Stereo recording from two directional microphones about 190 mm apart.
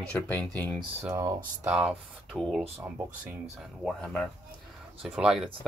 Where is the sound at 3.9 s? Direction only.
5° left (ahead or behind).